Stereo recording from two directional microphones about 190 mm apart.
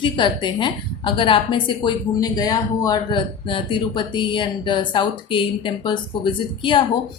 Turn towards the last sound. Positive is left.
turn(degrees=25)  # may be behind; listen again after turning